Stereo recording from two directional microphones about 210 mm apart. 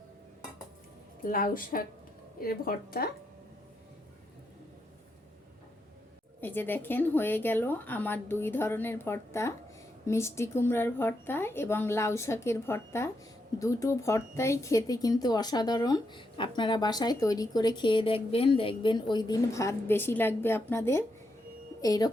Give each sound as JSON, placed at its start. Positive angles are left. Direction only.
{"t": 1.2, "sound": "a woman's voice", "side_deg": 40}
{"t": 6.4, "sound": "a woman's voice", "side_deg": 10}